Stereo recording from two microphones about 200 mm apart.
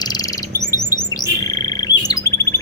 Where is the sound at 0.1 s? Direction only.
20° left (ahead or behind).